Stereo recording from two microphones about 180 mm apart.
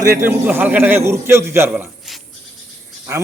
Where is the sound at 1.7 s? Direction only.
Centre (ahead or behind).